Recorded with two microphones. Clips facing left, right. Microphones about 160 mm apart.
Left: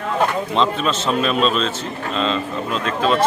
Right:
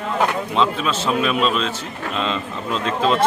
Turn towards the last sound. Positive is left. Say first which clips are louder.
# even
turn(degrees=-20)  # may be behind; listen again after turning